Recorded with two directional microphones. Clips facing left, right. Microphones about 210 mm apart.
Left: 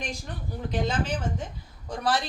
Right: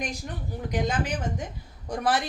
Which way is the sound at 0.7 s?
15° right (ahead or behind).